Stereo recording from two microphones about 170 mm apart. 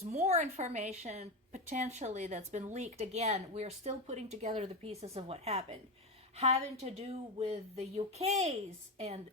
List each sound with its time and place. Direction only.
0.0 s a woman's voice: 40° right (ahead or behind)